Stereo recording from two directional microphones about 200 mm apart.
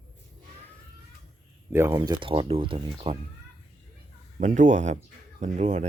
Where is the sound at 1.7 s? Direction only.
10° right (ahead or behind).